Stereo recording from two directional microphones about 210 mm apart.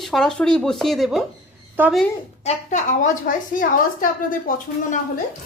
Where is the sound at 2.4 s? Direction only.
35° left (ahead or behind).